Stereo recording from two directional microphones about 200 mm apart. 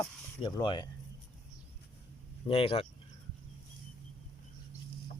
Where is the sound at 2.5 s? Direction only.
25° left (ahead or behind).